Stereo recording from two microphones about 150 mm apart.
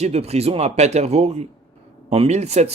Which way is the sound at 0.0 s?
45° right (ahead or behind).